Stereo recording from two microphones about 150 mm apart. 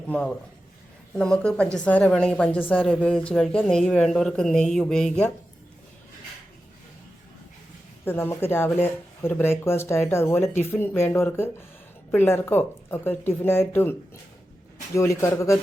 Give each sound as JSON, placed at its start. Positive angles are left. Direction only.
{"t": 0.1, "sound": "a woman's voice", "side_deg": 10}
{"t": 8.0, "sound": "speech", "side_deg": 15}